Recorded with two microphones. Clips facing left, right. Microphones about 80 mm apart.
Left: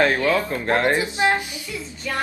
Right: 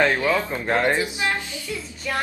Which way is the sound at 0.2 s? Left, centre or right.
Centre.